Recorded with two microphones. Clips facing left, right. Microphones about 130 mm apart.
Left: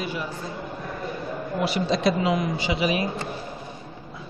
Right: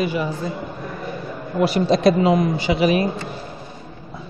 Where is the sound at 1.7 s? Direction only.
45° right (ahead or behind).